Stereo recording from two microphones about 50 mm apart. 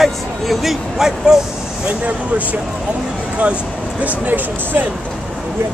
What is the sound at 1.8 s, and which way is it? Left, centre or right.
Speech, right.